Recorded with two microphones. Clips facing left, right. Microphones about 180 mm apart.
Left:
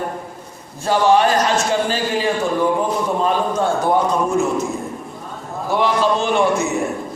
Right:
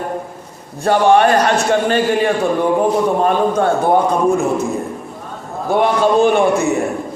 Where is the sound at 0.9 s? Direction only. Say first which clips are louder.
Right 3 dB; 60° right (ahead or behind).